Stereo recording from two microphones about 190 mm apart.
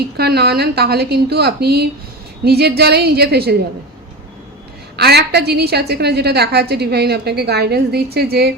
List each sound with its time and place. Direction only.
0.2 s a woman's voice: 55° right (ahead or behind)
4.9 s a woman's voice: 60° right (ahead or behind)